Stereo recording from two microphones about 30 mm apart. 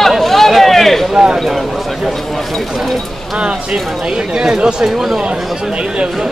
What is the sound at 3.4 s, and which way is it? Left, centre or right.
Speech, right.